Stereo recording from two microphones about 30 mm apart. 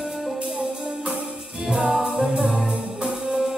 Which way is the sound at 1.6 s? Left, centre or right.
Right.